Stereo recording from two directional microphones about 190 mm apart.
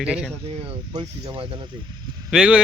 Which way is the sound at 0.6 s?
20° right (ahead or behind).